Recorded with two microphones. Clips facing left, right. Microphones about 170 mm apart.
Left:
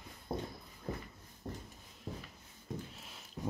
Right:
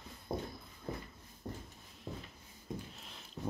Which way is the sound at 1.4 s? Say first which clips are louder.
Even; 25° left (ahead or behind).